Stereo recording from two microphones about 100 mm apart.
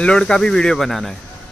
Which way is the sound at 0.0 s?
10° left (ahead or behind).